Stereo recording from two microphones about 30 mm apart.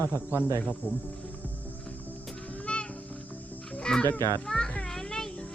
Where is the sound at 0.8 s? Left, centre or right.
Left.